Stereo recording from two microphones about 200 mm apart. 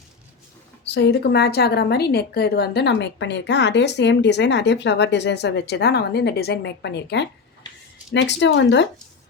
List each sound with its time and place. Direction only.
0.9 s a woman's voice: 60° left (ahead or behind)